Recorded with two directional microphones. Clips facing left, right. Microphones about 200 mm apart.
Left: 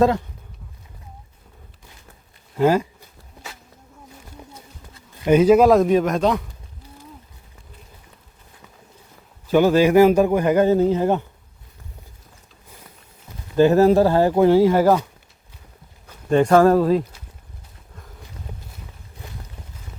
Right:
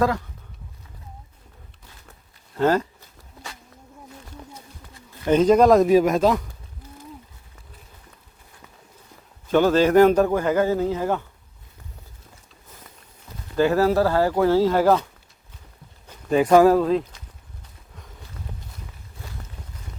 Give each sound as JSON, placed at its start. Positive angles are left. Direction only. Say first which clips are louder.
{"t": 2.6, "sound": "a man's voice", "louder": "left 2 dB", "side_deg": 10}
{"t": 5.2, "sound": "a man's voice", "louder": "left 2 dB", "side_deg": 10}
{"t": 9.5, "sound": "a man's voice", "louder": "left 2 dB", "side_deg": 10}
{"t": 13.6, "sound": "speech", "louder": "left 5 dB", "side_deg": 20}
{"t": 16.0, "sound": "a man's voice", "louder": "left 2 dB", "side_deg": -5}